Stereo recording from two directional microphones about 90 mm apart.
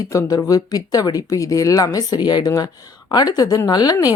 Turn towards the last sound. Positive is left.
turn(degrees=45)  # may be behind; listen again after turning